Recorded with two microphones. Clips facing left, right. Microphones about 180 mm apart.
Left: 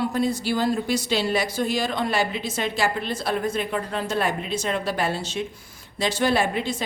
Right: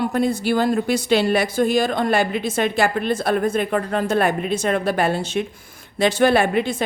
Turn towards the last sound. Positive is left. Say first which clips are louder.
# right 5 dB
turn(degrees=-55)  # may be behind; listen again after turning